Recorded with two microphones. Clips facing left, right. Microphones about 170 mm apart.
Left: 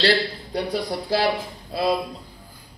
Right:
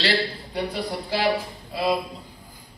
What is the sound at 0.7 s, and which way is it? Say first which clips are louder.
Speech: left 6 dB; 40° left (ahead or behind).